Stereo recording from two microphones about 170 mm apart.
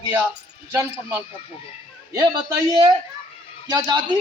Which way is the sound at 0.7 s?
15° right (ahead or behind).